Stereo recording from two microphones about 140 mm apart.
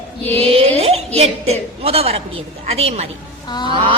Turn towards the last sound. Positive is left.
turn(degrees=30)  # may be behind; listen again after turning